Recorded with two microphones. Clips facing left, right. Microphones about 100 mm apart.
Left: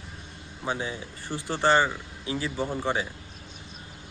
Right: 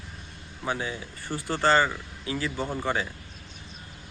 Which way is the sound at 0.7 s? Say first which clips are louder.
Even; 20° left (ahead or behind).